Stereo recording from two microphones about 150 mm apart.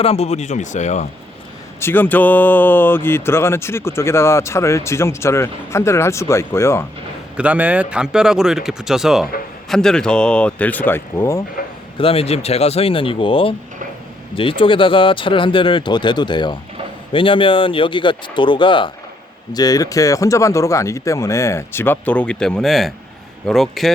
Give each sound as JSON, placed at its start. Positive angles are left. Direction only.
{"t": 0.0, "sound": "speech", "side_deg": 40}
{"t": 1.8, "sound": "speech", "side_deg": 15}
{"t": 7.3, "sound": "speech", "side_deg": -10}
{"t": 11.9, "sound": "speech", "side_deg": 40}